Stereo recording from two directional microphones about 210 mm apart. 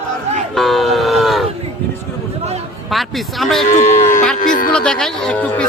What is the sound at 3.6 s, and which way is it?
A man's voice, 35° left (ahead or behind).